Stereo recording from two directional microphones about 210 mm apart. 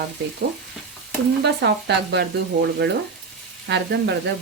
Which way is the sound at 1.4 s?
55° right (ahead or behind).